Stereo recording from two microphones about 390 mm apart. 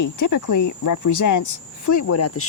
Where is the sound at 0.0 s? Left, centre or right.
Left.